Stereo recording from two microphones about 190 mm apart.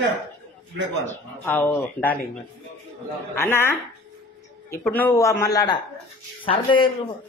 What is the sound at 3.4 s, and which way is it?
Speech, 10° left (ahead or behind).